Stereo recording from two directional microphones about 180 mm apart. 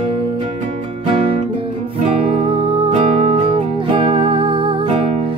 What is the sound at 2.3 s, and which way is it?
Music, 30° right (ahead or behind).